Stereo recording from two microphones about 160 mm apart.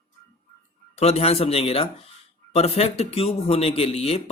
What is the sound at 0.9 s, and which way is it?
Speech, 40° left (ahead or behind).